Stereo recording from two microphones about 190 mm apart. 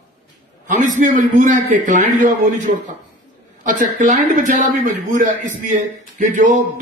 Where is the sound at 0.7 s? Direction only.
40° right (ahead or behind).